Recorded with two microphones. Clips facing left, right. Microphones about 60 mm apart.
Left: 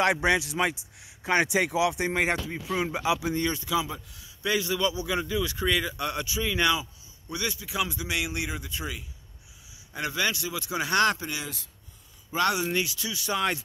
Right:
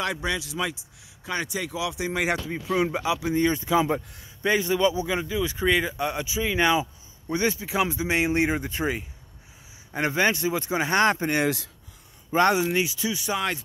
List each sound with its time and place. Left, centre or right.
0.0 s speech: left
1.8 s speech: left
2.2 s speech: centre
3.0 s speech: centre
3.3 s speech: centre
3.5 s speech: right
4.5 s speech: right
11.4 s speech: right
12.3 s speech: right
12.6 s speech: centre